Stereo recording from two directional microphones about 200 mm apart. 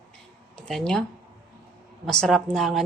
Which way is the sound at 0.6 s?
5° left (ahead or behind).